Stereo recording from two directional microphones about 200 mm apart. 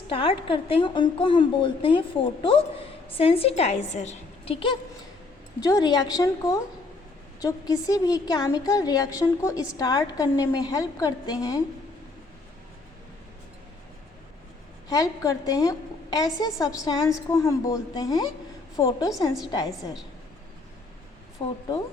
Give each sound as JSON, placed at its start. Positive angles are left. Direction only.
{"t": 0.1, "sound": "a woman's voice", "side_deg": 25}
{"t": 5.5, "sound": "a woman's voice", "side_deg": 15}
{"t": 7.7, "sound": "a woman's voice", "side_deg": 20}
{"t": 14.8, "sound": "a woman's voice", "side_deg": 15}
{"t": 21.4, "sound": "a woman's voice", "side_deg": 25}